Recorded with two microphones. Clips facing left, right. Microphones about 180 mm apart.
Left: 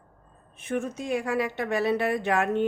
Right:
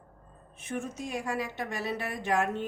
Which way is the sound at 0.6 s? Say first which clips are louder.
Left 6 dB; 60° left (ahead or behind).